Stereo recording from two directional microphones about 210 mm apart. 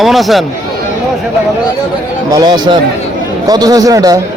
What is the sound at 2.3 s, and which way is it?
A man's voice, 20° right (ahead or behind).